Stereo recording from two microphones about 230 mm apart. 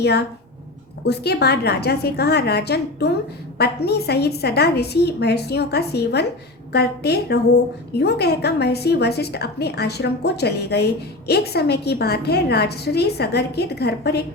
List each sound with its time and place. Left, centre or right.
0.0 s a woman's voice: left